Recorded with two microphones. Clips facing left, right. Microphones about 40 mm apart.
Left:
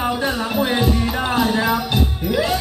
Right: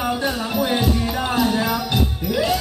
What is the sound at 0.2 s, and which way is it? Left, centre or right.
Music, left.